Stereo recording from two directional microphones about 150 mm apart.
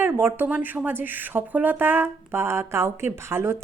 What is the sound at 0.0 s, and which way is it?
A woman's voice, 15° right (ahead or behind).